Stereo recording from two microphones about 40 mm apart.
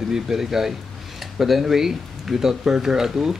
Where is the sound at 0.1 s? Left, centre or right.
Centre.